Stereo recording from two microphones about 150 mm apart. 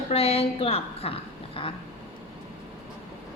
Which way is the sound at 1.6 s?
35° left (ahead or behind).